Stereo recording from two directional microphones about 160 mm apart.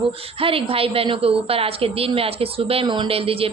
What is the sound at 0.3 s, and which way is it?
A woman's voice, 35° right (ahead or behind).